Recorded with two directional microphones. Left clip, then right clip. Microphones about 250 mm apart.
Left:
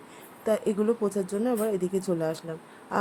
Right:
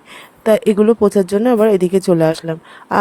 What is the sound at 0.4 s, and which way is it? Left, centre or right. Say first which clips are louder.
Speech: right 13 dB; right.